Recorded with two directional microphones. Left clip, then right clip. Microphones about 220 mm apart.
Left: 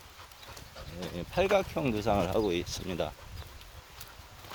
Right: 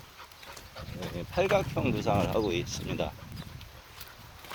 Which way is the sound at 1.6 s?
20° left (ahead or behind).